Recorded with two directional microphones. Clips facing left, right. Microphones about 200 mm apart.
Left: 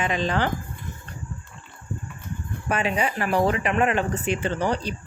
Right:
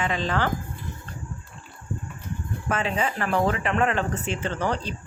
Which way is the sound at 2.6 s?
15° left (ahead or behind).